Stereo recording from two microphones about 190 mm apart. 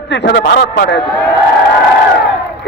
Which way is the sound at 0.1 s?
65° left (ahead or behind).